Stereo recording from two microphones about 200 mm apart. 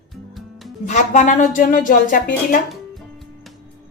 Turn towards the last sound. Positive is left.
turn(degrees=0)  # may be behind; listen again after turning